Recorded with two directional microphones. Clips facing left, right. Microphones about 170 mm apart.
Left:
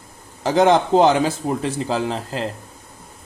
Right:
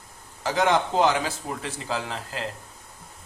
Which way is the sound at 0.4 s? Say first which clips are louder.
Left 7 dB; 25° left (ahead or behind).